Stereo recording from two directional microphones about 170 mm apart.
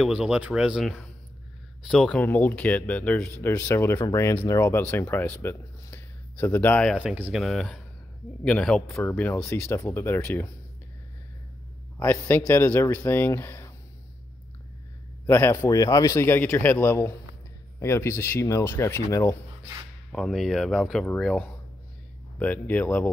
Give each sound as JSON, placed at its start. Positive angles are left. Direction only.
{"t": 0.0, "sound": "speech", "side_deg": -5}
{"t": 7.0, "sound": "speech", "side_deg": -10}
{"t": 12.0, "sound": "speech", "side_deg": 15}
{"t": 15.2, "sound": "speech", "side_deg": 15}
{"t": 20.1, "sound": "speech", "side_deg": 5}